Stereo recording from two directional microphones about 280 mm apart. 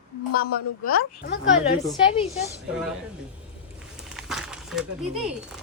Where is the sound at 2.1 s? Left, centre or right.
Left.